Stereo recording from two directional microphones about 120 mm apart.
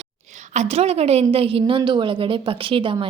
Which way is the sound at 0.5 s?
65° right (ahead or behind).